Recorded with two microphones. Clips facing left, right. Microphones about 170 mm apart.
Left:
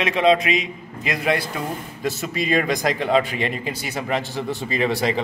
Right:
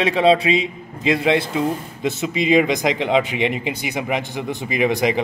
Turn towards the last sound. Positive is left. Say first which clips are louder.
# right 3 dB
turn(degrees=-15)  # may be behind; listen again after turning